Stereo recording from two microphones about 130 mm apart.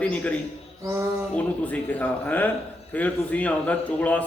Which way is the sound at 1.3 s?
10° left (ahead or behind).